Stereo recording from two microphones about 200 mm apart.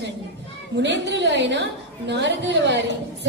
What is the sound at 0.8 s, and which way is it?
A woman's voice, 60° right (ahead or behind).